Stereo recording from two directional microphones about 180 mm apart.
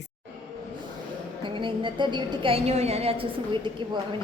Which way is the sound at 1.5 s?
25° right (ahead or behind).